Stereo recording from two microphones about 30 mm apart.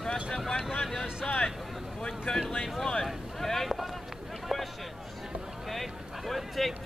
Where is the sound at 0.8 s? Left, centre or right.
Centre.